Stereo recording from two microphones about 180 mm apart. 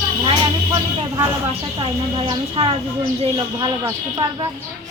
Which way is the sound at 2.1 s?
30° right (ahead or behind).